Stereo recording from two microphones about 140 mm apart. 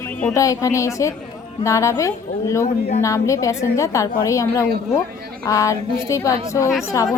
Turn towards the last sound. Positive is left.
turn(degrees=25)  # may be behind; listen again after turning